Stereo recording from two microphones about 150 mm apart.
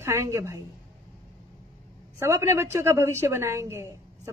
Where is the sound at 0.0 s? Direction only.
15° right (ahead or behind).